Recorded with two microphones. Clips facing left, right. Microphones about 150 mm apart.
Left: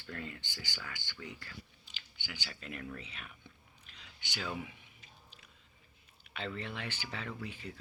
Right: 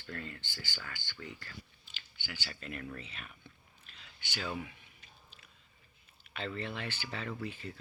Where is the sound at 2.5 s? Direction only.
5° left (ahead or behind).